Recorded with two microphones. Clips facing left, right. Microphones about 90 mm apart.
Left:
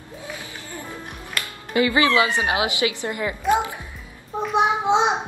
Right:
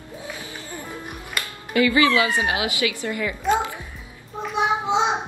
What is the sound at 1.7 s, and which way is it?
Speech, 25° left (ahead or behind).